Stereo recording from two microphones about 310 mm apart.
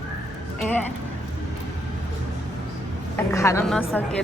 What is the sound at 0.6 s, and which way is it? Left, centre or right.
Speech, centre.